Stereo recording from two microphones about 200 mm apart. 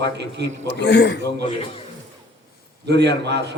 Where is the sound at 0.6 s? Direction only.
60° left (ahead or behind).